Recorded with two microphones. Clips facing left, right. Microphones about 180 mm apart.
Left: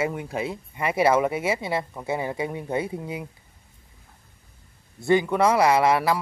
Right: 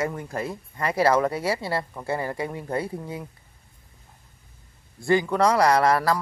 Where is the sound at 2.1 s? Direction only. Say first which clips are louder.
Even; 20° left (ahead or behind).